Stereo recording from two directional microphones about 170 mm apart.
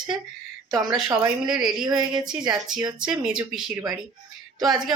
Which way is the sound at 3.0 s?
5° right (ahead or behind).